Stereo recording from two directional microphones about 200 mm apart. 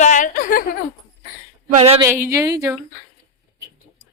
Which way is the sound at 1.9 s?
15° right (ahead or behind).